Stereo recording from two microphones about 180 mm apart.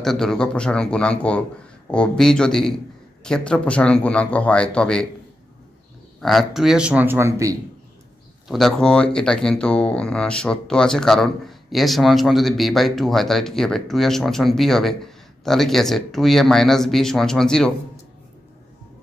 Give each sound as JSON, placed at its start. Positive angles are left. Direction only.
{"t": 0.0, "sound": "speech", "side_deg": 0}
{"t": 6.2, "sound": "speech", "side_deg": 0}
{"t": 8.5, "sound": "speech", "side_deg": 0}